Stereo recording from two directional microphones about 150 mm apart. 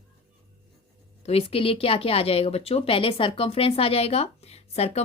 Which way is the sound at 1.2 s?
40° left (ahead or behind).